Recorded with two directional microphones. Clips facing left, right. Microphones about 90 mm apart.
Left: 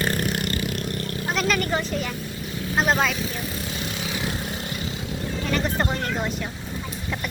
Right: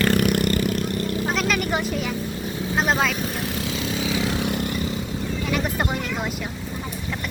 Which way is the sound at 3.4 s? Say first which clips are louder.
Right 4 dB; 90° right.